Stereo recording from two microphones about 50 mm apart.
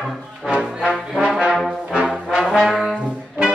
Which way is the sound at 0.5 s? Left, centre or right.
Centre.